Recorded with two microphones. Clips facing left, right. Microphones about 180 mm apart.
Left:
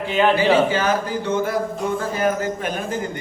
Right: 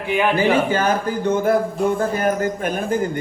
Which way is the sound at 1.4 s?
55° right (ahead or behind).